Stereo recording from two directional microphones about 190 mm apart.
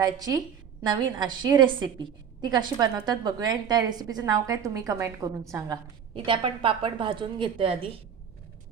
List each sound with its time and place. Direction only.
0.0 s a woman's voice: 20° right (ahead or behind)